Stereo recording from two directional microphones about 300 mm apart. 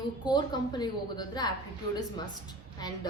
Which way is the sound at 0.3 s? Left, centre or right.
Centre.